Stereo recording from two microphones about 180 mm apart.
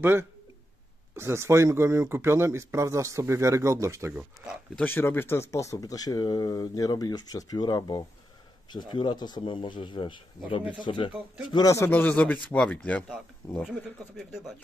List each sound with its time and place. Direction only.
0.0 s speech: 10° right (ahead or behind)
4.7 s a man's voice: 10° left (ahead or behind)
13.6 s speech: 5° right (ahead or behind)